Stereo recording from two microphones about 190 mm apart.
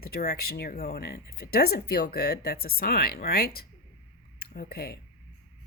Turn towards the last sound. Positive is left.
turn(degrees=55)  # may be behind; listen again after turning